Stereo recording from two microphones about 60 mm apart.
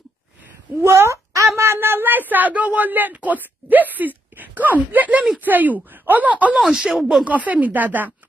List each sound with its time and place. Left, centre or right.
0.8 s a sound: right
1.6 s speech: right
6.6 s speech: centre
7.2 s speech: right